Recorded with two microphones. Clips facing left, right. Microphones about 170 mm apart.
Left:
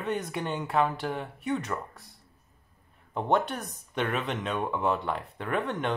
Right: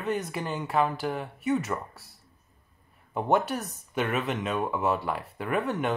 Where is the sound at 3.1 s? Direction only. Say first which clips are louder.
Right 1 dB; 5° right (ahead or behind).